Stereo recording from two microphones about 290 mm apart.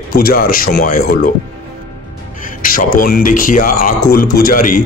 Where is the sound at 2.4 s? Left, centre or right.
Left.